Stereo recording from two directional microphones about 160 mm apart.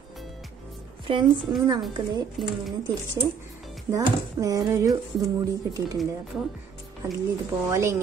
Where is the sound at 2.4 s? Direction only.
Centre (ahead or behind).